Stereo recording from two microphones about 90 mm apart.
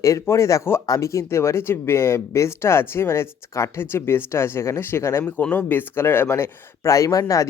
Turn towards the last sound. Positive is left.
turn(degrees=40)  # may be behind; listen again after turning